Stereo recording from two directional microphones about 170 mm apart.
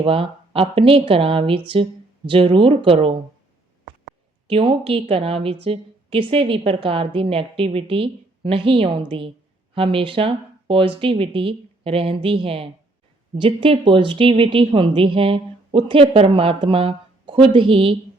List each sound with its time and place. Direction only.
0.0 s speech: 35° right (ahead or behind)
4.4 s a woman's voice: 35° right (ahead or behind)